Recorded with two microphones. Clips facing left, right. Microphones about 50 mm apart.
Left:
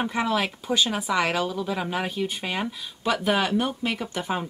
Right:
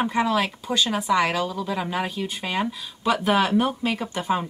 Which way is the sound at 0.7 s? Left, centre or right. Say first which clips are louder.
Right 1 dB; centre.